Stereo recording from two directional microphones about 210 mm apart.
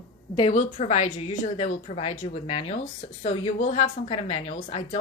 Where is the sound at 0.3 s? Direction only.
30° left (ahead or behind).